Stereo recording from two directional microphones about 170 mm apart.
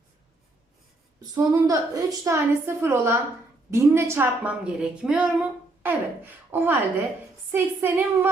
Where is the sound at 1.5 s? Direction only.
20° right (ahead or behind).